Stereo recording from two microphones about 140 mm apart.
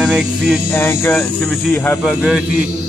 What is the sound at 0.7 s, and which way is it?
Speech, 15° left (ahead or behind).